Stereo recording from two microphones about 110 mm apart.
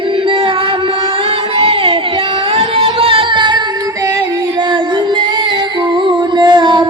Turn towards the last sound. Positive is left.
turn(degrees=-45)  # may be behind; listen again after turning